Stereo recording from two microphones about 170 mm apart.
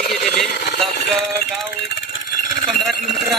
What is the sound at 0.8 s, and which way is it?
Music, centre (ahead or behind).